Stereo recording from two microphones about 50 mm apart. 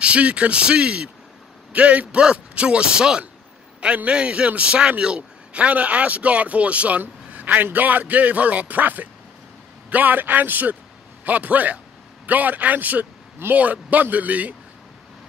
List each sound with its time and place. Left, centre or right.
0.0 s a man's voice: right
7.0 s a sound: right
7.7 s speech: right